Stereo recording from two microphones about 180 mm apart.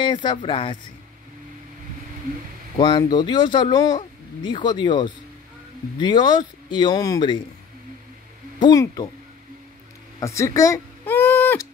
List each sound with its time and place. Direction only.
0.0 s speech: 25° left (ahead or behind)
2.8 s speech: 25° left (ahead or behind)
8.5 s speech: 25° left (ahead or behind)
10.2 s a sound: 15° left (ahead or behind)